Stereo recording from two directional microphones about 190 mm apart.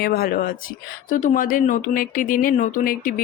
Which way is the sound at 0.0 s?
55° left (ahead or behind).